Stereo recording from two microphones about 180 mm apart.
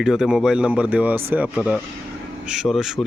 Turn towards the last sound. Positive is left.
turn(degrees=0)  # may be behind; listen again after turning